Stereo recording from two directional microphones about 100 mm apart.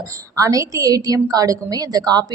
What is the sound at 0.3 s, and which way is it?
A woman's voice, 35° right (ahead or behind).